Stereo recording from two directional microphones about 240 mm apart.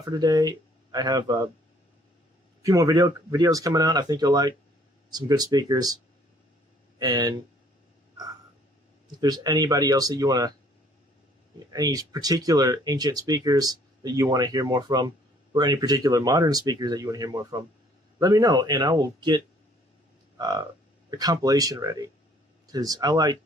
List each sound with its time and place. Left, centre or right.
0.0 s speech: centre
2.6 s speech: centre
7.0 s speech: centre
9.2 s speech: centre
11.7 s speech: centre
21.2 s speech: centre